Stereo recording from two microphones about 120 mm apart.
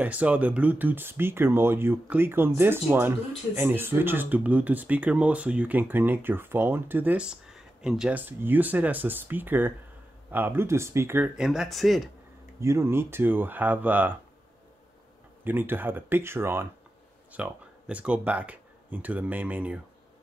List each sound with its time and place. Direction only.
0.0 s speech: 10° right (ahead or behind)
11.4 s speech: 5° right (ahead or behind)
12.5 s speech: 20° right (ahead or behind)
15.4 s speech: 15° right (ahead or behind)